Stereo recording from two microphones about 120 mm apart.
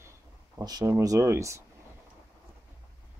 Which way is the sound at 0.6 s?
35° right (ahead or behind).